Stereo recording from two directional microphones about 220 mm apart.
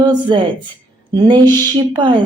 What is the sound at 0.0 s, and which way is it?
A woman's voice, 20° right (ahead or behind).